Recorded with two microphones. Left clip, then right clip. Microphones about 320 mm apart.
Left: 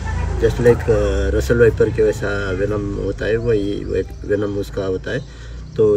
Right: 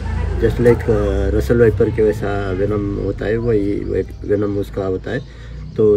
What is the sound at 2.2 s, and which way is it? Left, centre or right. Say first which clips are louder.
Speech: right 1 dB; centre.